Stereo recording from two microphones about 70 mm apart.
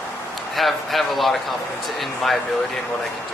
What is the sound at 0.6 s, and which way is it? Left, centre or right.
Speech, centre.